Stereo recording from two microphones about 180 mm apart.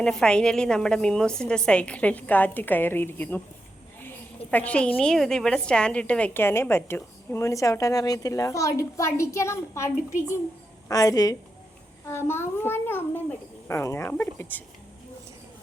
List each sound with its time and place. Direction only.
0.0 s a woman's voice: 5° left (ahead or behind)
4.5 s a woman's voice: 5° left (ahead or behind)